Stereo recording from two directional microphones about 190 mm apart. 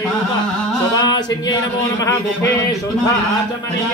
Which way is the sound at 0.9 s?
20° left (ahead or behind).